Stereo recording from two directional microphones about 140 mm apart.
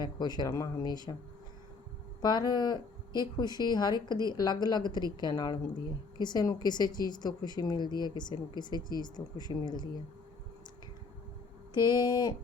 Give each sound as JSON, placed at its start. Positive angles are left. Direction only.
{"t": 0.0, "sound": "speech", "side_deg": 30}
{"t": 2.2, "sound": "a woman's voice", "side_deg": 30}
{"t": 11.8, "sound": "a woman's voice", "side_deg": 30}